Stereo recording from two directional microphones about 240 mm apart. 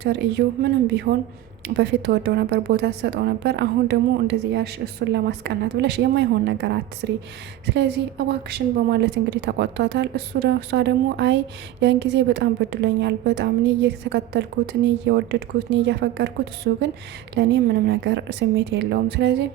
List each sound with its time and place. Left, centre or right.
0.0 s a woman's voice: right